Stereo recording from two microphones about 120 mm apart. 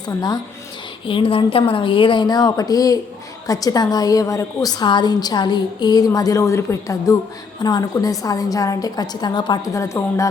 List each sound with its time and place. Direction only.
1.0 s a woman's voice: 45° left (ahead or behind); by 10.2 s 25° left (ahead or behind)